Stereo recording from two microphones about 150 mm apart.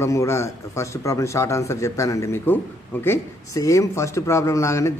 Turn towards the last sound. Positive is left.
turn(degrees=20)  # may be behind; listen again after turning